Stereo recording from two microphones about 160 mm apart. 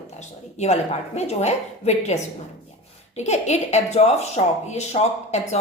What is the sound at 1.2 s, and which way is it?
A woman's voice, 45° left (ahead or behind).